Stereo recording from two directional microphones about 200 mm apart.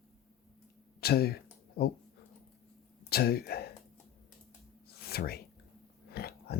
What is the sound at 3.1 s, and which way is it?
Speech, 50° left (ahead or behind).